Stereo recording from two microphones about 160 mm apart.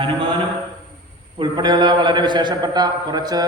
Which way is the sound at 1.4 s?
30° right (ahead or behind).